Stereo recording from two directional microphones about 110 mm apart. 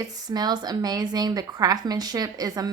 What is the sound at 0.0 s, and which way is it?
A woman's voice, 40° right (ahead or behind).